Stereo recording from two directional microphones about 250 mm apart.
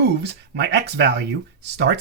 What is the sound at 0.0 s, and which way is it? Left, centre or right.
Speech, right.